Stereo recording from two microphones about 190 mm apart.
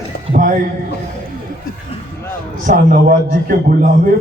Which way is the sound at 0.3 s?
45° right (ahead or behind).